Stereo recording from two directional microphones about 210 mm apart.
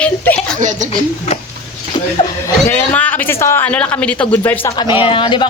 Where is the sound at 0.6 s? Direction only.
35° right (ahead or behind).